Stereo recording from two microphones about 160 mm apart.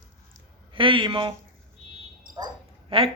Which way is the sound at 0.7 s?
30° right (ahead or behind).